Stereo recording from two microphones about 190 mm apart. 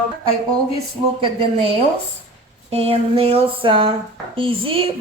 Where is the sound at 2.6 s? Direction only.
30° right (ahead or behind).